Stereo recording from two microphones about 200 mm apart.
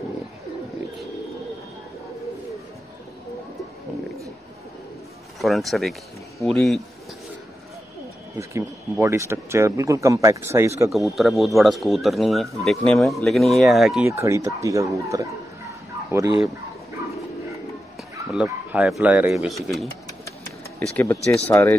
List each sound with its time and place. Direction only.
5.4 s speech: centre (ahead or behind)
8.4 s speech: 15° right (ahead or behind)
10.9 s speech: centre (ahead or behind)
14.0 s speech: 15° right (ahead or behind)
18.3 s speech: 5° right (ahead or behind); by 21.7 s 10° left (ahead or behind)